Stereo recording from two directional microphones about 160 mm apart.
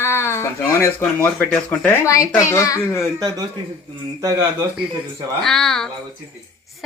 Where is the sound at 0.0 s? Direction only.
15° left (ahead or behind).